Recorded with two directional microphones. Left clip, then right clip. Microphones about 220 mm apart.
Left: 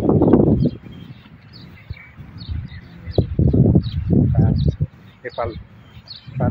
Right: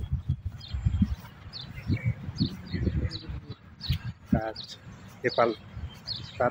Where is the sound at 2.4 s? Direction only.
60° right (ahead or behind).